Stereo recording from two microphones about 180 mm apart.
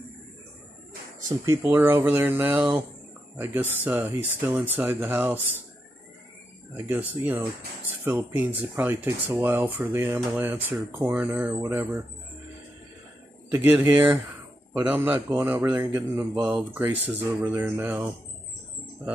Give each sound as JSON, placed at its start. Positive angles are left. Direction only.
{"t": 1.3, "sound": "speech", "side_deg": -15}
{"t": 6.9, "sound": "speech", "side_deg": -10}
{"t": 13.5, "sound": "speech", "side_deg": -10}